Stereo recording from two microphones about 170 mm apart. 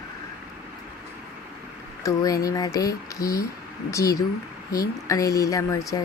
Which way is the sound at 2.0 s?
20° left (ahead or behind).